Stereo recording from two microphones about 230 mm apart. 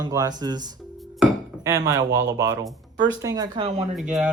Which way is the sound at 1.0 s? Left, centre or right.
Centre.